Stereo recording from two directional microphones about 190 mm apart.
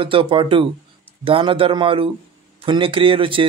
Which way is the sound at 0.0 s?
30° right (ahead or behind).